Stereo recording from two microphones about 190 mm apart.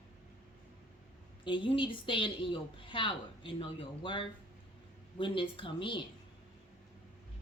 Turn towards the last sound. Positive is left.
turn(degrees=25)  # may be behind; listen again after turning